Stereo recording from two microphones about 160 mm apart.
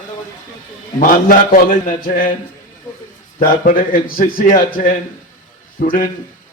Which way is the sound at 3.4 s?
60° left (ahead or behind).